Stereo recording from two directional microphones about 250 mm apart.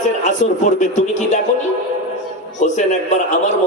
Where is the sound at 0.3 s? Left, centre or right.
Left.